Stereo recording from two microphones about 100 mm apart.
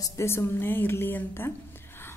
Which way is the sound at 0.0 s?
30° left (ahead or behind).